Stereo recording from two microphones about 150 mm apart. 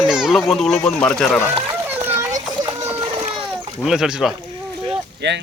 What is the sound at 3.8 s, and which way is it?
Speech, 5° right (ahead or behind).